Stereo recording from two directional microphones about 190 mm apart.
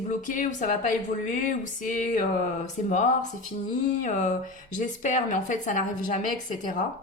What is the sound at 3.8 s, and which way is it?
A woman's voice, 40° left (ahead or behind).